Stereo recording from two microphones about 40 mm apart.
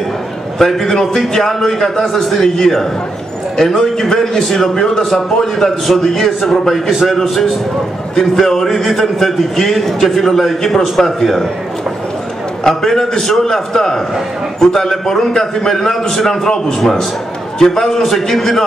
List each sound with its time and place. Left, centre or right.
0.6 s a man's voice: centre
6.9 s a man's voice: centre
8.2 s a man's voice: centre
12.6 s a man's voice: centre